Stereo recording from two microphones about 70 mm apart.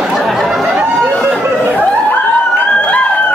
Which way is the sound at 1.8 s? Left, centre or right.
Left.